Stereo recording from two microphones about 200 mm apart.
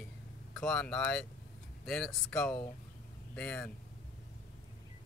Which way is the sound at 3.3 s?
5° left (ahead or behind).